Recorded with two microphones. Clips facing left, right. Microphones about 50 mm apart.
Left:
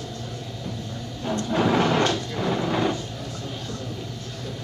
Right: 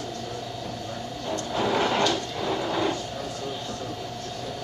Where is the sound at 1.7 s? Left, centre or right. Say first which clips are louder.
Left 2 dB; centre.